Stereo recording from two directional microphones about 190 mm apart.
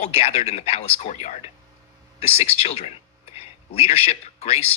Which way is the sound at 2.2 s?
30° left (ahead or behind).